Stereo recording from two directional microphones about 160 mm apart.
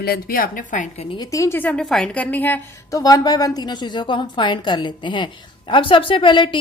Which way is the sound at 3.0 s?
25° left (ahead or behind).